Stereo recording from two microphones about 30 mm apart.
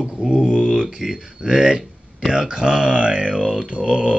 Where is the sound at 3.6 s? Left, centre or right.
Right.